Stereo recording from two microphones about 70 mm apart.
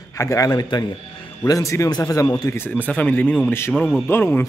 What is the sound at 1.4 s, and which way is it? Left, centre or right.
Speech, left.